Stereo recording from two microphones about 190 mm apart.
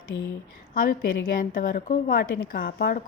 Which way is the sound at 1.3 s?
45° left (ahead or behind).